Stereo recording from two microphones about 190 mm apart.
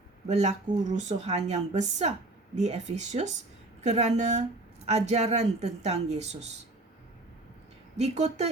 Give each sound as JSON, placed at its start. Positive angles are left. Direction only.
{"t": 0.3, "sound": "speech", "side_deg": -35}
{"t": 7.9, "sound": "speech", "side_deg": -35}